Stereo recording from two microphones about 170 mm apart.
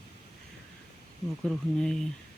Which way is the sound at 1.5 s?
5° left (ahead or behind).